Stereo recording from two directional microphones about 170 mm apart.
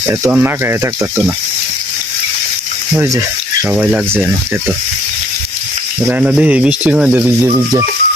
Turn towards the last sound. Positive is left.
turn(degrees=-5)  # may be behind; listen again after turning